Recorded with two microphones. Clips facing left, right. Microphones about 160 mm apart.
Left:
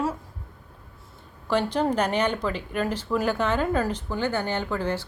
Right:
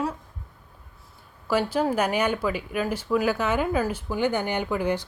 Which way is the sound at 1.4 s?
5° right (ahead or behind).